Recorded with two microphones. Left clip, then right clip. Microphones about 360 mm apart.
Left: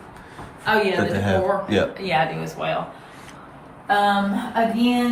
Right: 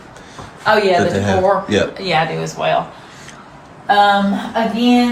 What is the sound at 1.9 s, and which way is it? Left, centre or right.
Speech, centre.